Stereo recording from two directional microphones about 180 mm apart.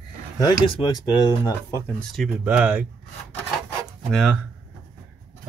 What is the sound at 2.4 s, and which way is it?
Speech, 10° right (ahead or behind).